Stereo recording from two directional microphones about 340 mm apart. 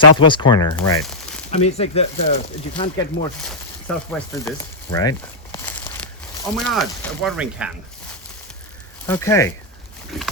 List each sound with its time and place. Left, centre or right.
0.2 s speech: centre
3.9 s pig: centre
4.3 s speech: centre
9.0 s speech: centre
10.1 s pig: centre